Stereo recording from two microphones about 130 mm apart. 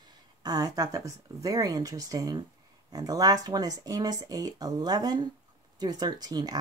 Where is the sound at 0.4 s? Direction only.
30° right (ahead or behind).